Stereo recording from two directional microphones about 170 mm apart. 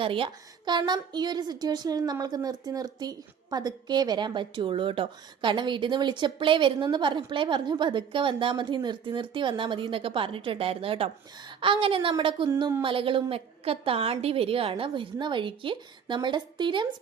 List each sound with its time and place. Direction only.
0.0 s a woman's voice: 30° right (ahead or behind)